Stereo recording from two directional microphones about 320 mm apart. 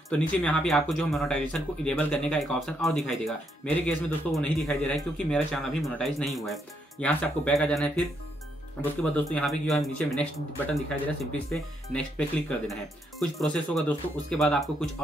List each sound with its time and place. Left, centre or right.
0.2 s speech: centre
9.1 s speech: centre
11.3 s speech: centre